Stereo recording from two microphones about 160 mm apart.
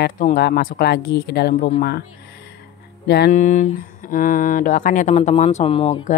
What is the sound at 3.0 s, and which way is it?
Music, 90° left.